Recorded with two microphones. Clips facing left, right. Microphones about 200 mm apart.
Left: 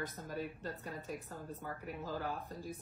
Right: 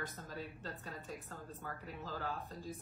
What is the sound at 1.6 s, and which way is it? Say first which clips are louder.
Speech: left 2 dB; 15° left (ahead or behind).